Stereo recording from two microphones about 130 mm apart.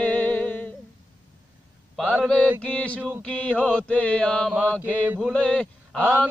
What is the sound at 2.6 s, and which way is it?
Mantra, 10° left (ahead or behind).